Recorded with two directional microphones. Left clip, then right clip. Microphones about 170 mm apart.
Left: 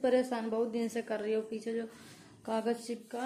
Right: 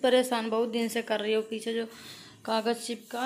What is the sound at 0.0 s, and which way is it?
Speech, 5° right (ahead or behind).